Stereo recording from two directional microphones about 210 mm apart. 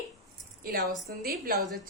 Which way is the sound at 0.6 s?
45° right (ahead or behind).